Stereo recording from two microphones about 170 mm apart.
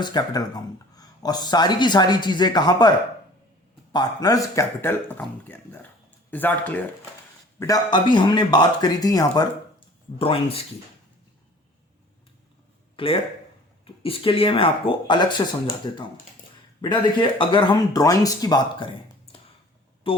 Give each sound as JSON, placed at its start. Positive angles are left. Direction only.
{"t": 0.0, "sound": "speech", "side_deg": 25}
{"t": 3.9, "sound": "speech", "side_deg": 20}
{"t": 7.6, "sound": "speech", "side_deg": 25}
{"t": 10.2, "sound": "speech", "side_deg": 35}
{"t": 13.0, "sound": "speech", "side_deg": 30}